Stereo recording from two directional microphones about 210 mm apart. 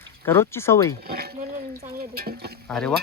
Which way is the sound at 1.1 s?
45° right (ahead or behind).